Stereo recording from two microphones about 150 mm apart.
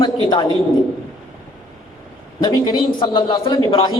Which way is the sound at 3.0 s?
35° left (ahead or behind).